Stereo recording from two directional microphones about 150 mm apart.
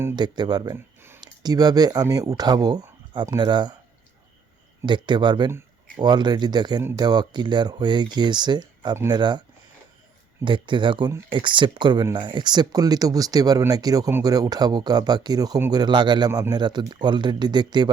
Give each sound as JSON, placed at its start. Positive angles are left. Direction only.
{"t": 0.2, "sound": "speech", "side_deg": -30}
{"t": 4.9, "sound": "speech", "side_deg": -30}
{"t": 10.4, "sound": "speech", "side_deg": -30}